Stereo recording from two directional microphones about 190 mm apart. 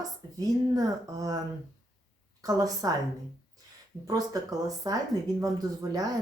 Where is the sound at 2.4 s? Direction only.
20° right (ahead or behind).